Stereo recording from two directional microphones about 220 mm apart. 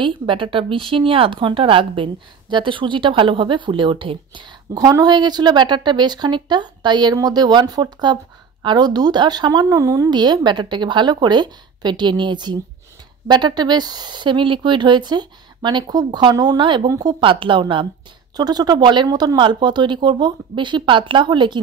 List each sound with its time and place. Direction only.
0.0 s speech: 25° right (ahead or behind)